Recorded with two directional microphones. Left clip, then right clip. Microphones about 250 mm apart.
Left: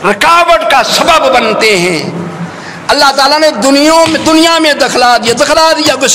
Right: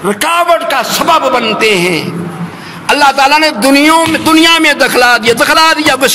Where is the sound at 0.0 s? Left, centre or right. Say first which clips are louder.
Left 4 dB; right.